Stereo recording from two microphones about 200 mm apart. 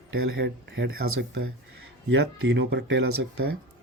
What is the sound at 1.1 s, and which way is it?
Speech, 85° right.